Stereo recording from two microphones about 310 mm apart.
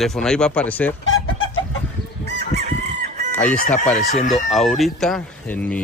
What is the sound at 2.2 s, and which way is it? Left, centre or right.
Chicken, right.